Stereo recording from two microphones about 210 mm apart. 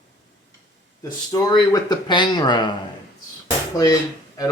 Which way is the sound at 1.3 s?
15° left (ahead or behind).